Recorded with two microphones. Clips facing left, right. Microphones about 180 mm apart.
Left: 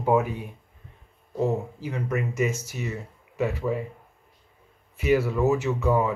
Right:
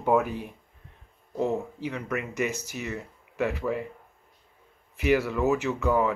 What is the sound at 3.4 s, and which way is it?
Speech, centre (ahead or behind).